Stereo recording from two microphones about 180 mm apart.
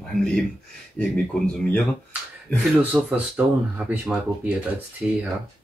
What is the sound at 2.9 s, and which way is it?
Speech, 5° right (ahead or behind).